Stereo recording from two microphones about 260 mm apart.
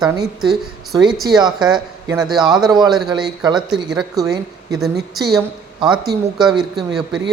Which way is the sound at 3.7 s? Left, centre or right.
Centre.